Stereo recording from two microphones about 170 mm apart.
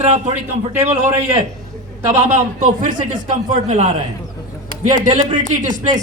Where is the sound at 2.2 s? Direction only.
45° right (ahead or behind).